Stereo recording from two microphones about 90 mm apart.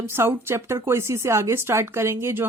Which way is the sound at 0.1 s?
30° right (ahead or behind).